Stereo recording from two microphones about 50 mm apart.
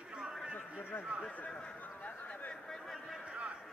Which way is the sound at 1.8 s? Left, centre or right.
Left.